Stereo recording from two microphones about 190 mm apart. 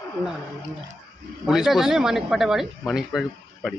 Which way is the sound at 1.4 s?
5° right (ahead or behind).